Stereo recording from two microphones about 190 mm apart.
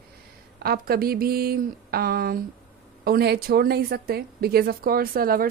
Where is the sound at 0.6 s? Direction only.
50° right (ahead or behind).